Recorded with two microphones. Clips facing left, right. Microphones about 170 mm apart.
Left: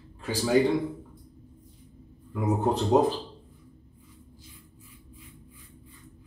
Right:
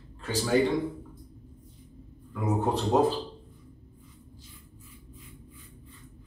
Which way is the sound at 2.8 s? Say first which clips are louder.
Left 2 dB; 20° left (ahead or behind).